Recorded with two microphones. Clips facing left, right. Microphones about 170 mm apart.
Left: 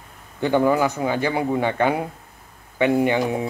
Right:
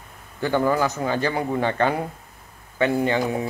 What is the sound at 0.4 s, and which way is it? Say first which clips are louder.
A man's voice: left 3 dB; 15° left (ahead or behind).